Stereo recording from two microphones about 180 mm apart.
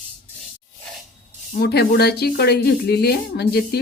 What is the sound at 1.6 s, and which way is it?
Speech, 65° left (ahead or behind).